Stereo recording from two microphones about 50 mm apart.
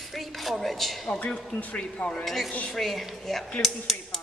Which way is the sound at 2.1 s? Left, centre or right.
Centre.